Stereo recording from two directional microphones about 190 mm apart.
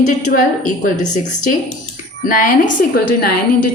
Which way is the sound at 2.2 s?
45° left (ahead or behind).